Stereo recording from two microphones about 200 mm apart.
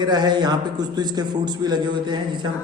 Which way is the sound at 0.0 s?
20° right (ahead or behind).